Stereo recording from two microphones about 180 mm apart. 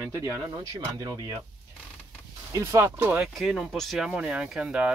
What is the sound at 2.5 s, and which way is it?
Speech, 15° right (ahead or behind).